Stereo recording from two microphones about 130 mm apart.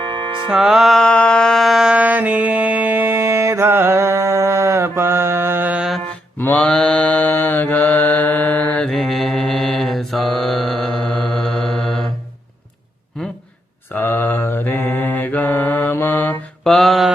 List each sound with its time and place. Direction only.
0.0 s music: 40° right (ahead or behind)
0.5 s mantra: 5° right (ahead or behind)
6.4 s mantra: 10° left (ahead or behind)
13.9 s mantra: 15° left (ahead or behind)
16.6 s mantra: centre (ahead or behind)